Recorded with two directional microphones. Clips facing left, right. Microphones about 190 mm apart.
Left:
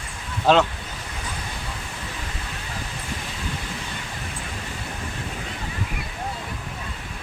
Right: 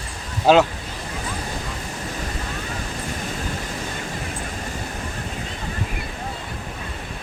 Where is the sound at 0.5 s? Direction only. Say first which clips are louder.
Right 3 dB; 5° right (ahead or behind).